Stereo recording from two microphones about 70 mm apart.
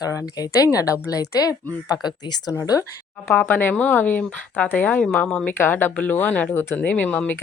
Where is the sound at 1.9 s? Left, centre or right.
Left.